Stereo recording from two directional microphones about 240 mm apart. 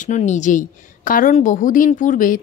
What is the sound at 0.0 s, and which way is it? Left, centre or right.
A woman's voice, left.